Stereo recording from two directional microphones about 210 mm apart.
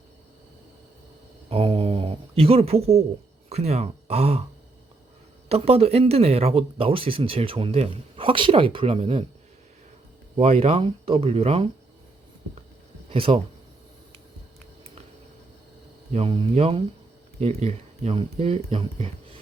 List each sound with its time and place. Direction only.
1.5 s a sound: 25° right (ahead or behind)
3.5 s speech: 30° right (ahead or behind)
5.5 s speech: 30° right (ahead or behind)
10.3 s speech: 30° right (ahead or behind)
13.1 s speech: 25° right (ahead or behind)
16.1 s speech: 25° right (ahead or behind)